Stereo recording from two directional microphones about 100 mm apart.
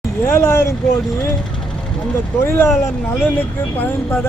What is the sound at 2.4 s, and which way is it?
Speech, 25° left (ahead or behind).